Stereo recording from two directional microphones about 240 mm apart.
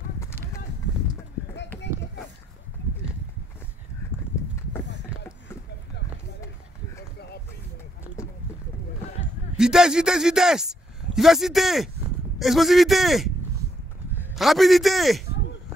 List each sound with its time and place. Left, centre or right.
0.2 s a sound: centre
1.5 s run: left
9.6 s a man's voice: centre